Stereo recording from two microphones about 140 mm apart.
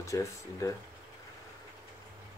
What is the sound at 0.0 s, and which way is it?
Speech, 20° left (ahead or behind).